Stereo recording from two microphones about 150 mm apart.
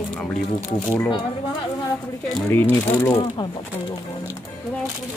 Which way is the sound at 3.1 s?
30° left (ahead or behind).